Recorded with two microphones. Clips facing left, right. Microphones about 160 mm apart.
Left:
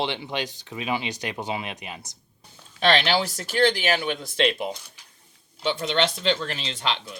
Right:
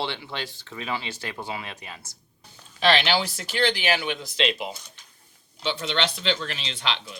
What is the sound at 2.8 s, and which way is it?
Speech, 45° left (ahead or behind).